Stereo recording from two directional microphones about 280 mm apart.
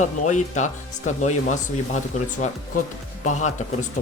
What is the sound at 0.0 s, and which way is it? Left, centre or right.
Speech, left.